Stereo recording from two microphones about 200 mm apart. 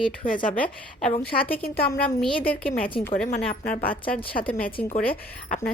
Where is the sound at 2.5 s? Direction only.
45° left (ahead or behind).